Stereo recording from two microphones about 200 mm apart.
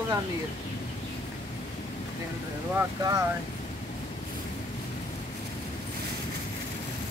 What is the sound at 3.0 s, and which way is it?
Speech, 20° right (ahead or behind).